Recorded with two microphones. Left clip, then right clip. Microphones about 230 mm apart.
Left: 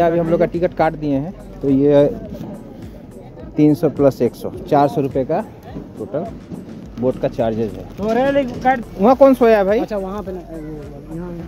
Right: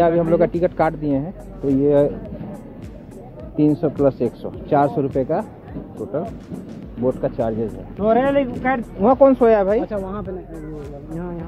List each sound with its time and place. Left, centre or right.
0.0 s speech: centre
3.5 s speech: centre
8.0 s speech: right
9.0 s speech: left
9.8 s speech: left